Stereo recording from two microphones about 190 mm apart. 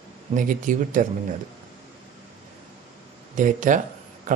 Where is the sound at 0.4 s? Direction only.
45° right (ahead or behind).